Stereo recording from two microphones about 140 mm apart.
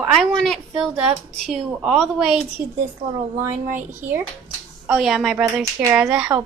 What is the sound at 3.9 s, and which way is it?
Speech, 15° right (ahead or behind).